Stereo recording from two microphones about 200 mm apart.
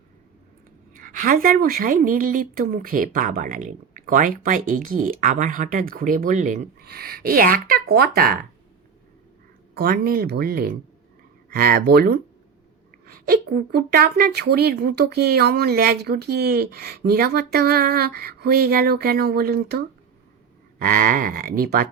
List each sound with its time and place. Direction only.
0.9 s a woman's voice: 40° right (ahead or behind)
9.7 s a woman's voice: 50° right (ahead or behind)